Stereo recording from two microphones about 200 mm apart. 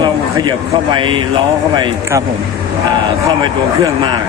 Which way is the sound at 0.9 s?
25° right (ahead or behind).